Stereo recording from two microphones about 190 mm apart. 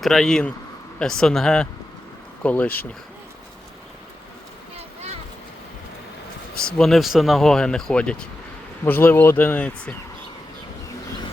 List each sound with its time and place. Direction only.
0.0 s a man's voice: centre (ahead or behind)
6.5 s a sound: 50° left (ahead or behind)
6.7 s a man's voice: centre (ahead or behind)